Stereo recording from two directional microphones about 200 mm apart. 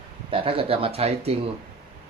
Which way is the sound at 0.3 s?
25° right (ahead or behind).